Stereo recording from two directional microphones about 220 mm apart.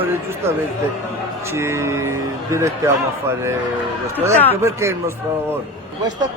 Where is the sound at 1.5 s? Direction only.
10° right (ahead or behind).